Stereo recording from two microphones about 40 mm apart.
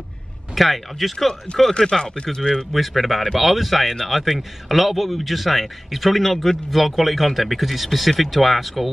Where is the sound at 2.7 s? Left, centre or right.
Centre.